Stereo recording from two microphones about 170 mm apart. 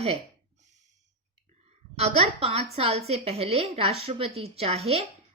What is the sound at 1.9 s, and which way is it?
Speech, 35° right (ahead or behind).